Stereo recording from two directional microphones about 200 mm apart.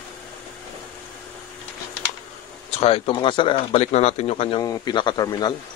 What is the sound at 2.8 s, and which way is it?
Speech, 30° left (ahead or behind).